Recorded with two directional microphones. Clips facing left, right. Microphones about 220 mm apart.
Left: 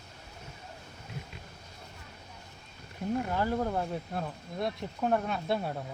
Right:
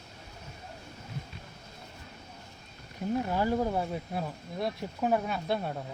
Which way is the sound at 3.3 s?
10° right (ahead or behind).